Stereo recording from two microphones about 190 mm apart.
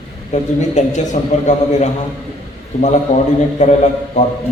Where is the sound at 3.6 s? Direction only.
40° left (ahead or behind).